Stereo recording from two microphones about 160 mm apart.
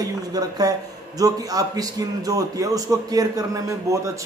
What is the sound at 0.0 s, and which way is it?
A man's voice, 25° right (ahead or behind).